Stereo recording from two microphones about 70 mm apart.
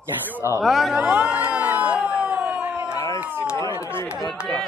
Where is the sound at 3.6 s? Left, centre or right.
Left.